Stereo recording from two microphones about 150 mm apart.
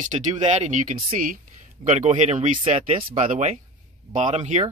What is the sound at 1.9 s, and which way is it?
Speech, 50° right (ahead or behind).